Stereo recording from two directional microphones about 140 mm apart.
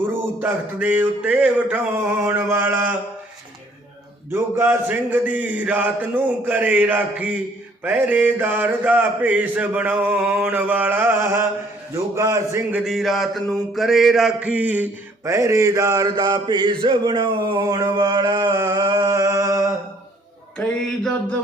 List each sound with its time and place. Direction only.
0.4 s mantra: 10° right (ahead or behind)
4.3 s mantra: 15° right (ahead or behind)
12.7 s mantra: centre (ahead or behind); by 19.6 s 20° right (ahead or behind)
20.6 s a sound: 5° left (ahead or behind)